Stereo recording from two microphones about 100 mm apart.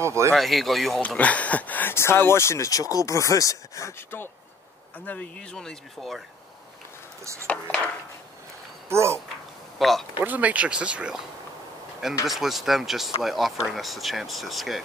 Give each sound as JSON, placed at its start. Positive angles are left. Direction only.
{"t": 0.0, "sound": "a sound", "side_deg": -30}
{"t": 0.3, "sound": "speech", "side_deg": 0}
{"t": 1.0, "sound": "speech", "side_deg": 15}
{"t": 5.0, "sound": "speech", "side_deg": 15}
{"t": 8.8, "sound": "speech", "side_deg": -25}
{"t": 9.8, "sound": "speech", "side_deg": 0}
{"t": 10.1, "sound": "speech", "side_deg": -15}
{"t": 12.3, "sound": "speech", "side_deg": 0}